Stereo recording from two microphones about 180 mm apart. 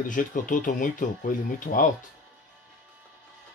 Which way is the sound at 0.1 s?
45° left (ahead or behind).